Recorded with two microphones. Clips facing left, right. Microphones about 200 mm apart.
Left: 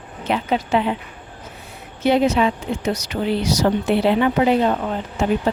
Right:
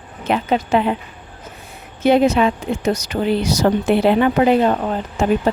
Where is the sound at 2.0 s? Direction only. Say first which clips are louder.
Right 3 dB; 50° right (ahead or behind).